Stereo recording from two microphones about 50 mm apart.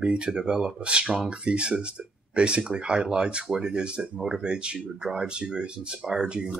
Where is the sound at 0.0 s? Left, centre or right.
Right.